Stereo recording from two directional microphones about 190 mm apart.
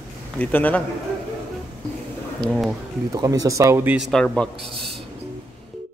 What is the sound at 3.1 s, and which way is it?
Speech, 20° right (ahead or behind).